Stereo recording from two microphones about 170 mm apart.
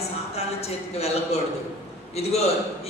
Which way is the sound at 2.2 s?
35° left (ahead or behind).